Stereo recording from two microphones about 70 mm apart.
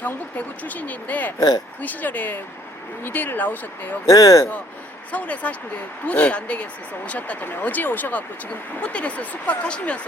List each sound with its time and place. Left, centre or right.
0.0 s speech: left
1.4 s speech: left
1.8 s speech: left
4.0 s speech: left
5.1 s speech: left